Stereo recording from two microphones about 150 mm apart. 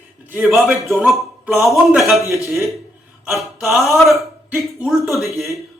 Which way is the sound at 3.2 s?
Centre (ahead or behind).